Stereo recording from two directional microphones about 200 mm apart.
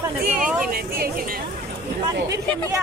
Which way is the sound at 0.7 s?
50° right (ahead or behind).